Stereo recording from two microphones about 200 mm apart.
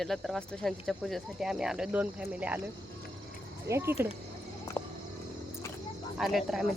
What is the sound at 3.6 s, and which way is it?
Speech, 15° right (ahead or behind).